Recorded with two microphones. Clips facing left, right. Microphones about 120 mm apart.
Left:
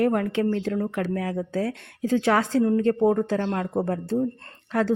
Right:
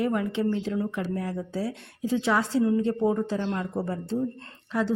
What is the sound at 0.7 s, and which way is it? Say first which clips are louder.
Speech: left 2 dB; 45° left (ahead or behind).